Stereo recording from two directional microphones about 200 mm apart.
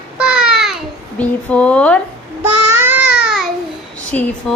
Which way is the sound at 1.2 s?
5° left (ahead or behind).